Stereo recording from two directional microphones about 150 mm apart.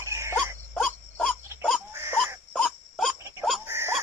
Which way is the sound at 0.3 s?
5° left (ahead or behind).